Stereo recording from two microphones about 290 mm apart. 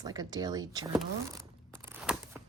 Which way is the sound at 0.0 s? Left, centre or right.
Centre.